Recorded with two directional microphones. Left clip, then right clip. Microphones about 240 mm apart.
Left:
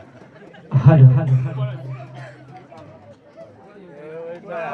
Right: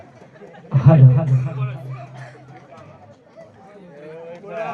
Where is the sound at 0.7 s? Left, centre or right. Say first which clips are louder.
Even; left.